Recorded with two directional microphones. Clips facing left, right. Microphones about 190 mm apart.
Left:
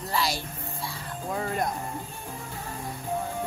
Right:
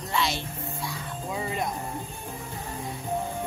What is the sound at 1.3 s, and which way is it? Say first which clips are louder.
Speech: left 2 dB; 5° right (ahead or behind).